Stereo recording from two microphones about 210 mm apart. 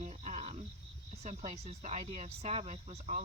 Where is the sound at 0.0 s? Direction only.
30° right (ahead or behind).